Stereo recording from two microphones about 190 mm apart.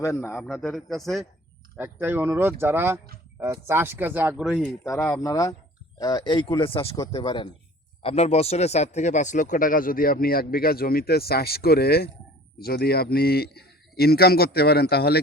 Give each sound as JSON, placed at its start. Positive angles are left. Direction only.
{"t": 0.0, "sound": "speech", "side_deg": 15}
{"t": 0.5, "sound": "speech", "side_deg": 0}
{"t": 1.7, "sound": "speech", "side_deg": -10}
{"t": 4.6, "sound": "speech", "side_deg": 15}